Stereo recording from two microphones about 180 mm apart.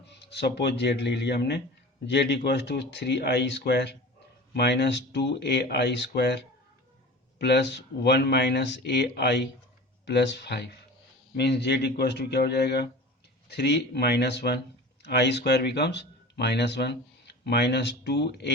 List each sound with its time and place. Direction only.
0.0 s speech: 70° left (ahead or behind)